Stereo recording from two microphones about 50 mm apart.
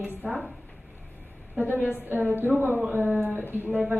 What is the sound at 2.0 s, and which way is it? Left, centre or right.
A woman's voice, right.